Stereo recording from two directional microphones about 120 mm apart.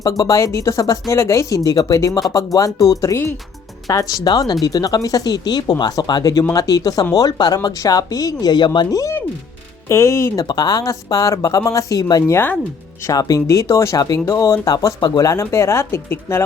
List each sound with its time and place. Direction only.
0.0 s speech: 30° left (ahead or behind)
10.4 s speech: 35° left (ahead or behind)